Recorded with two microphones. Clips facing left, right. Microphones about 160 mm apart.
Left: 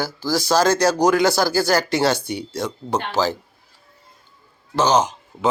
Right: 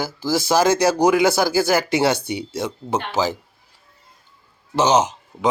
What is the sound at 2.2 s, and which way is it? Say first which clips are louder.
Speech: right 1 dB; 60° right (ahead or behind).